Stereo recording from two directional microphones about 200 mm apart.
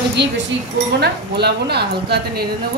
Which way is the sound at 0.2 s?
60° right (ahead or behind).